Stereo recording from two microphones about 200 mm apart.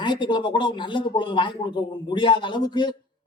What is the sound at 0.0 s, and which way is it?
A man's voice, 20° left (ahead or behind).